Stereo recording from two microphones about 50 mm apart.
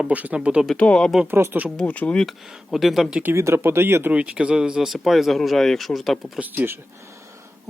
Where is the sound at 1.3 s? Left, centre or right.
Right.